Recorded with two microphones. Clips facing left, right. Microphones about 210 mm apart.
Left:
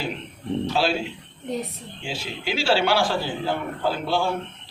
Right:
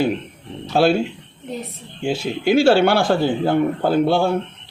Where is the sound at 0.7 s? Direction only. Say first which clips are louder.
Right 11 dB; 50° right (ahead or behind).